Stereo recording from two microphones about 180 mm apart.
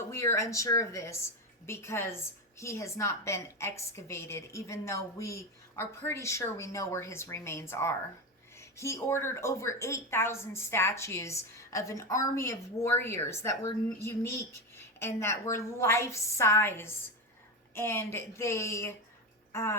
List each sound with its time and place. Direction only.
0.1 s a woman's voice: 15° left (ahead or behind)